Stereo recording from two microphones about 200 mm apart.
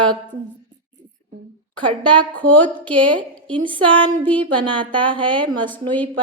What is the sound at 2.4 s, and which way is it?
Speech, 5° left (ahead or behind).